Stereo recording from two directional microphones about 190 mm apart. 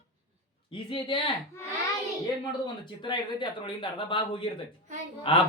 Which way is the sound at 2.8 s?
25° left (ahead or behind).